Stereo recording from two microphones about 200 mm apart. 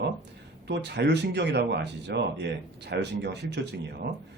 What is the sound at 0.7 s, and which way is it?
Speech, 60° right (ahead or behind).